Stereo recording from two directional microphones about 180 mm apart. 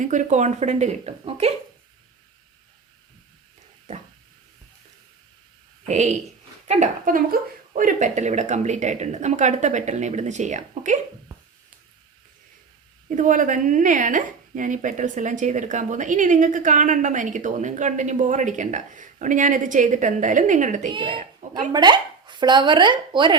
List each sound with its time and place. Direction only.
0.0 s speech: 45° right (ahead or behind)
5.9 s speech: 40° right (ahead or behind)
13.1 s a woman's voice: 45° right (ahead or behind)
20.9 s speech: 30° right (ahead or behind)